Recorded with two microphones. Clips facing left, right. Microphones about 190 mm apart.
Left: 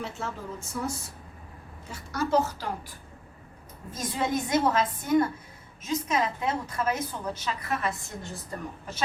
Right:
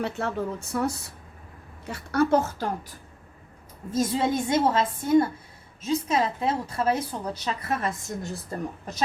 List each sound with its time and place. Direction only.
0.0 s a woman's voice: 65° right (ahead or behind)
3.9 s a woman's voice: 25° right (ahead or behind)